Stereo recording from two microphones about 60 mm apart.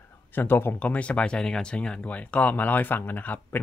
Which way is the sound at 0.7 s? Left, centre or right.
Left.